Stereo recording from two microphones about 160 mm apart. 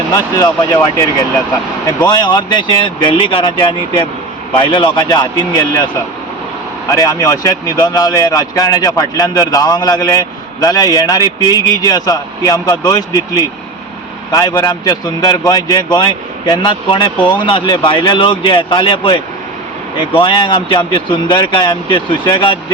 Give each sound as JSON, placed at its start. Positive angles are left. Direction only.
{"t": 0.3, "sound": "speech", "side_deg": 20}